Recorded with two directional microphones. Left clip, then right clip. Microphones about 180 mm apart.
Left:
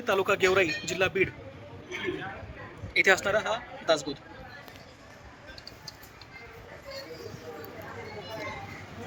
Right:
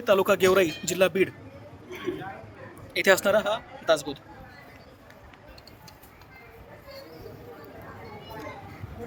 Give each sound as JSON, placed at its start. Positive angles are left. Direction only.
{"t": 0.0, "sound": "speech", "side_deg": -90}
{"t": 2.9, "sound": "speech", "side_deg": -90}